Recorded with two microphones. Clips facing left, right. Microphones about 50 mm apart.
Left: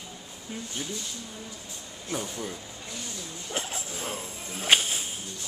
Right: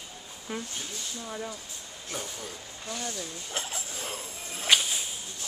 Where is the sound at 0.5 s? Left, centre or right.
Right.